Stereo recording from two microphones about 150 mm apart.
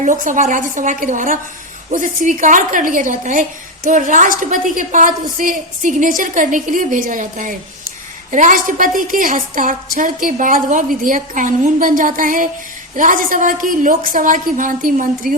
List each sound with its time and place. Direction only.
0.0 s a woman's voice: 55° right (ahead or behind)